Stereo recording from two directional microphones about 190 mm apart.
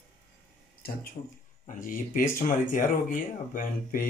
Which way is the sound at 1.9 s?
45° left (ahead or behind).